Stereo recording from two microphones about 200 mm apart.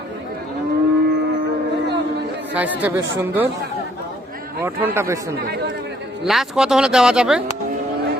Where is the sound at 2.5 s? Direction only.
10° right (ahead or behind).